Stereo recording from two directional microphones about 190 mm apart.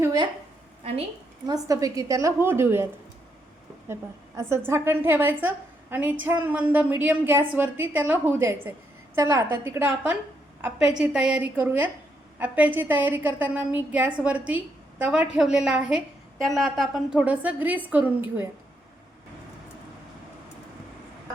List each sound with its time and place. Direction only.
0.0 s a sound: 20° right (ahead or behind)
1.5 s a woman's voice: 20° right (ahead or behind)
4.4 s a woman's voice: 15° right (ahead or behind)